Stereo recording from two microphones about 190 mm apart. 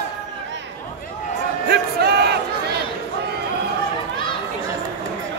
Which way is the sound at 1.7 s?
60° right (ahead or behind).